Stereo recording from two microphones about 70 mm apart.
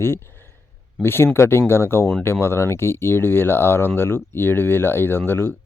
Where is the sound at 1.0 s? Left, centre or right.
Left.